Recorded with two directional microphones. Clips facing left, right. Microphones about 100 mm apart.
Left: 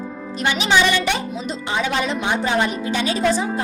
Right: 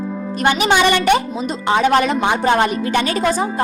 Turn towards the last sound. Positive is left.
turn(degrees=-55)  # may be behind; listen again after turning